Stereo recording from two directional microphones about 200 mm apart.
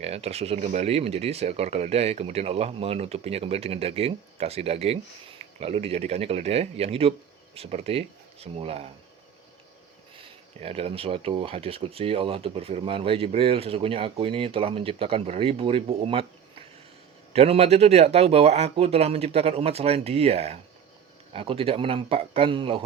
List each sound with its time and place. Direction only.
0.0 s speech: 30° right (ahead or behind)
10.2 s speech: 30° right (ahead or behind)
17.3 s speech: 30° right (ahead or behind)